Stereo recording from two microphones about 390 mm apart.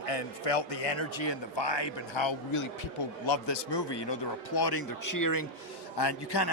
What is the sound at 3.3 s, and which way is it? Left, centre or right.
Speech, left.